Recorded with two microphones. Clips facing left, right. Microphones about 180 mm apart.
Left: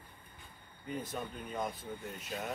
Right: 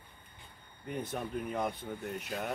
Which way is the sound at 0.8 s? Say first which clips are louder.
Right 2 dB; 65° right (ahead or behind).